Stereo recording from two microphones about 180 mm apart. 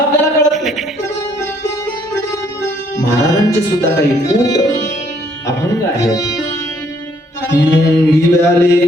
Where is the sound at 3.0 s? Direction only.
15° left (ahead or behind).